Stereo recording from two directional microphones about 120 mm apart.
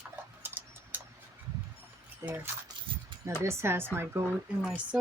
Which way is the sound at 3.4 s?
20° right (ahead or behind).